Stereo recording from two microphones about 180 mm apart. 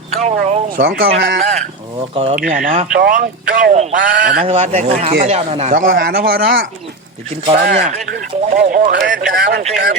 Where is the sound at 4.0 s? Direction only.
75° right (ahead or behind).